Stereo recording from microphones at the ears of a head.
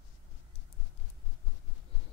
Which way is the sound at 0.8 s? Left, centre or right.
Left.